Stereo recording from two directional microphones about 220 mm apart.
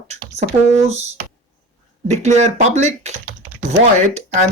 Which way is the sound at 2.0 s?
30° right (ahead or behind).